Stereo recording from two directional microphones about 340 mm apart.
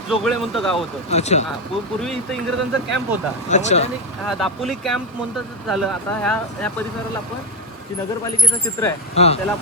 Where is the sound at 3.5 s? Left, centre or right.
Centre.